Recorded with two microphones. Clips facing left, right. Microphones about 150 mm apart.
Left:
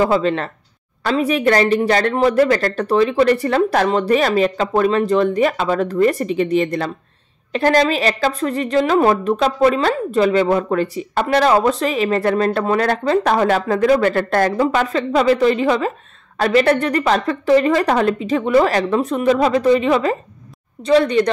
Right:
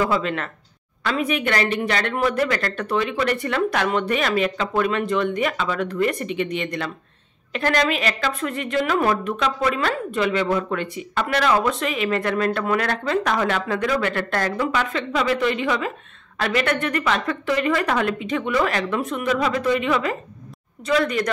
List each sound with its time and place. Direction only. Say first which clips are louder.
0.0 s a woman's voice: left 6 dB; 30° left (ahead or behind)